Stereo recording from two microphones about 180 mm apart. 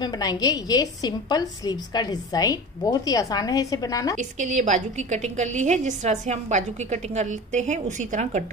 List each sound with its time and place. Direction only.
0.0 s a woman's voice: 20° left (ahead or behind)
4.2 s a woman's voice: 40° right (ahead or behind)